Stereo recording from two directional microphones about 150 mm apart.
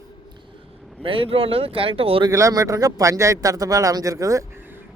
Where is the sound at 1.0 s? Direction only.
35° right (ahead or behind).